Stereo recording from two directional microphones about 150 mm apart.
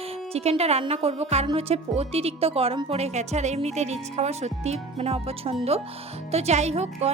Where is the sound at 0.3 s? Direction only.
45° right (ahead or behind).